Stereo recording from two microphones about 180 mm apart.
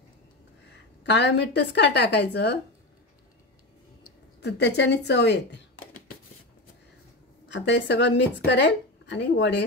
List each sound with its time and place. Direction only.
1.0 s speech: 75° left (ahead or behind)
4.4 s speech: 70° left (ahead or behind)
7.4 s speech: 80° left